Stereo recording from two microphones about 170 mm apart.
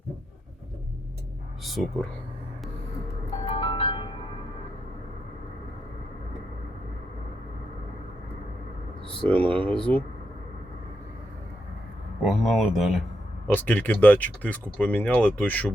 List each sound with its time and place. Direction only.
1.6 s speech: centre (ahead or behind)
3.5 s music: 30° left (ahead or behind)
9.2 s speech: 10° left (ahead or behind)
12.2 s speech: centre (ahead or behind)
13.5 s speech: 10° left (ahead or behind)